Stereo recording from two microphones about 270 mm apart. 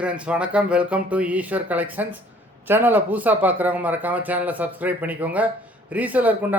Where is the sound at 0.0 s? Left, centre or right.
Centre.